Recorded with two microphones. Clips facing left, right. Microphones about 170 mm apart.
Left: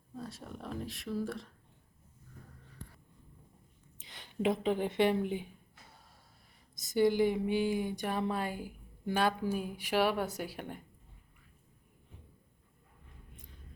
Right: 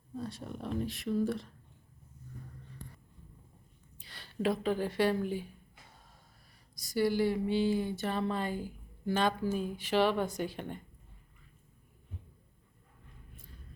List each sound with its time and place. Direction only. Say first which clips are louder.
0.2 s speech: right 4 dB; centre (ahead or behind)
3.9 s speech: even; 20° left (ahead or behind)
6.7 s speech: left 2 dB; 20° left (ahead or behind)